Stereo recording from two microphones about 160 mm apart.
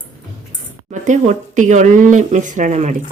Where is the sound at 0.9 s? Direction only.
50° right (ahead or behind).